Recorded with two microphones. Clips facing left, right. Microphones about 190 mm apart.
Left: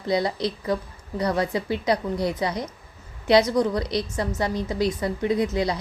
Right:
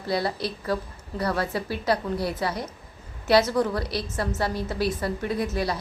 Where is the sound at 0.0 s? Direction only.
20° left (ahead or behind).